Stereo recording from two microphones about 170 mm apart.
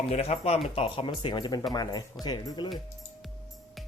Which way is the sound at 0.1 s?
40° left (ahead or behind).